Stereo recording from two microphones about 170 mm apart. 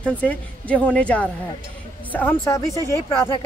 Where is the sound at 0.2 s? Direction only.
10° left (ahead or behind).